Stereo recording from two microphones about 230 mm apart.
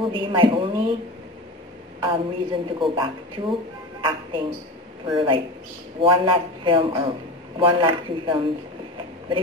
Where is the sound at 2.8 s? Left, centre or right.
Right.